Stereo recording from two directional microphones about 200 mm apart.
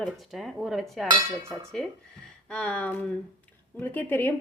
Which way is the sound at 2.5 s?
5° left (ahead or behind).